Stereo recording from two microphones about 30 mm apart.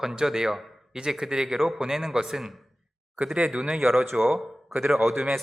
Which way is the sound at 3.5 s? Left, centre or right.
Right.